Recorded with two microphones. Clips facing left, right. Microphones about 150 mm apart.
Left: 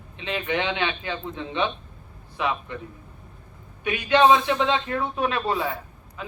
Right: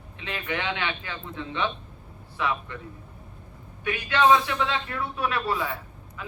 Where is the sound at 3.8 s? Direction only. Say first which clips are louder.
Left 4 dB; 20° left (ahead or behind).